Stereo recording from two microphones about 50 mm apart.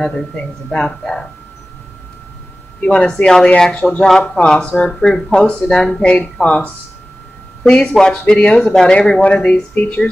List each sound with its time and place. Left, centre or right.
0.0 s speech: centre
2.8 s speech: left
3.1 s speech: centre; by 10.0 s left